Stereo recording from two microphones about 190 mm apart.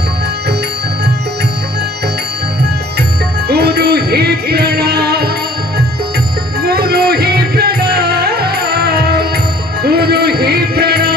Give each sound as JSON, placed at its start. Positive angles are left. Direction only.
{"t": 3.4, "sound": "music", "side_deg": -55}
{"t": 6.6, "sound": "music", "side_deg": -55}